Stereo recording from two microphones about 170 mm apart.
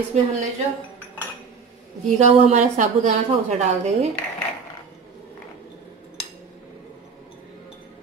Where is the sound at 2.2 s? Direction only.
45° right (ahead or behind).